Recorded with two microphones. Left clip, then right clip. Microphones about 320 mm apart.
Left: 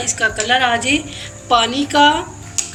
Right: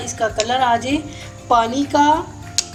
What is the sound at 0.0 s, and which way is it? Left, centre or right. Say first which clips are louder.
A woman's voice: left 2 dB; centre.